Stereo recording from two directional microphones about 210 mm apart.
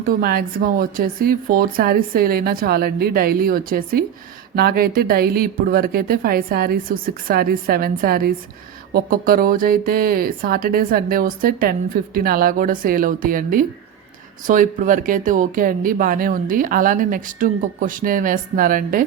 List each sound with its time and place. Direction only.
0.0 s speech: 45° right (ahead or behind)